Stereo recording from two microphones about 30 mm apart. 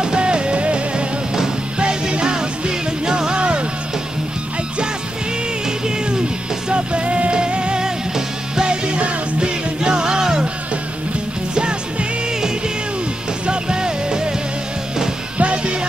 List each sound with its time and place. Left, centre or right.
0.0 s music: right
5.9 s music: right
6.7 s music: right
11.5 s music: right
12.4 s music: right
15.3 s music: right